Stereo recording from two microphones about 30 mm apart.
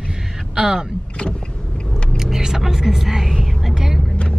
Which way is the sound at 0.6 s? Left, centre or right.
Right.